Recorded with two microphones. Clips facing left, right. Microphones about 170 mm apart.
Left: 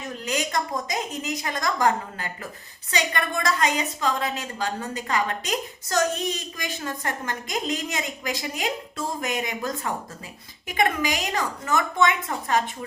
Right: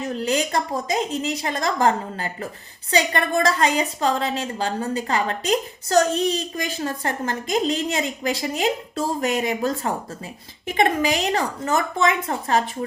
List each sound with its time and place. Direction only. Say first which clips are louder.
0.0 s a woman's voice: right 6 dB; 30° right (ahead or behind)